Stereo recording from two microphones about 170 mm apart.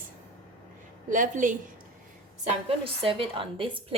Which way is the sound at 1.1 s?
50° right (ahead or behind).